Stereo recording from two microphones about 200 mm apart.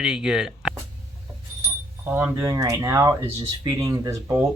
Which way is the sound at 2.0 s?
10° right (ahead or behind).